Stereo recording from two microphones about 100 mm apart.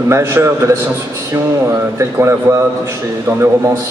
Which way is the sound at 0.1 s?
25° right (ahead or behind).